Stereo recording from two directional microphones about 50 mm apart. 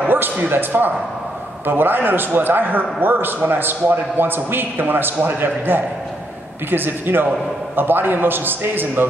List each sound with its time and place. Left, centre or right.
0.1 s a man's voice: right